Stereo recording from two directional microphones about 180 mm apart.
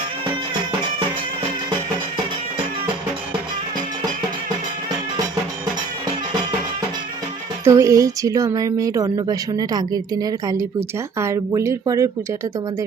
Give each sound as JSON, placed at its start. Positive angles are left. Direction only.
{"t": 7.6, "sound": "speech", "side_deg": -15}